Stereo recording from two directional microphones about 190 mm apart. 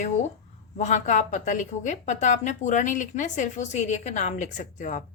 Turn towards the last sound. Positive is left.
turn(degrees=40)  # may be behind; listen again after turning